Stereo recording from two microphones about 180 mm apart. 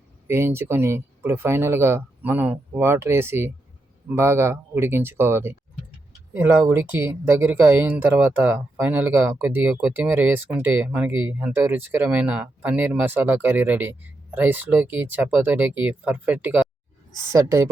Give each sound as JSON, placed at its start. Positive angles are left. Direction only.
{"t": 0.3, "sound": "speech", "side_deg": -15}